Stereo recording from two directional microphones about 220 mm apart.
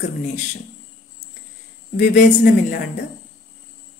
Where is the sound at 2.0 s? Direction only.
40° left (ahead or behind).